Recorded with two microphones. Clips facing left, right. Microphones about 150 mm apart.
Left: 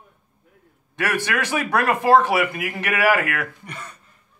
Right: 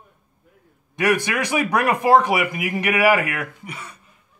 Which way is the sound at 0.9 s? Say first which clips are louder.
Right 3 dB; 15° right (ahead or behind).